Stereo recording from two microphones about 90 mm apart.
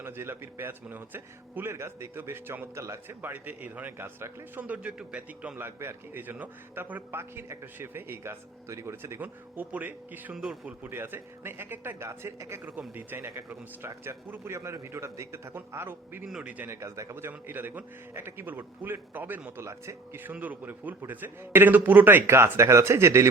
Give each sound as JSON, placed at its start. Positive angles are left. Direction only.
{"t": 0.0, "sound": "speech", "side_deg": -25}
{"t": 3.2, "sound": "speech", "side_deg": -20}
{"t": 5.6, "sound": "speech", "side_deg": -25}
{"t": 10.3, "sound": "speech", "side_deg": -5}
{"t": 10.7, "sound": "speech", "side_deg": -25}
{"t": 12.9, "sound": "speech", "side_deg": -20}
{"t": 16.2, "sound": "speech", "side_deg": -15}
{"t": 16.6, "sound": "speech", "side_deg": -35}
{"t": 19.6, "sound": "speech", "side_deg": -30}